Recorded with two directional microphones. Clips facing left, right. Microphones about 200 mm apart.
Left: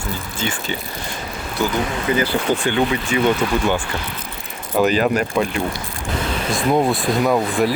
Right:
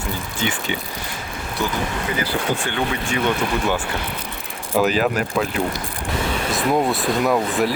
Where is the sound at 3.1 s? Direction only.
5° left (ahead or behind).